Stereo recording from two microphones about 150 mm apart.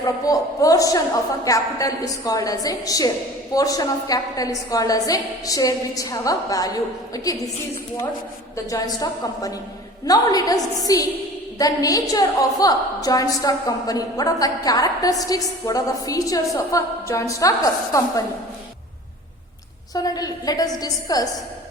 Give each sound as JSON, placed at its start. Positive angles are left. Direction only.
{"t": 0.0, "sound": "a woman's voice", "side_deg": 25}
{"t": 8.7, "sound": "a woman's voice", "side_deg": 25}
{"t": 19.9, "sound": "a woman's voice", "side_deg": 25}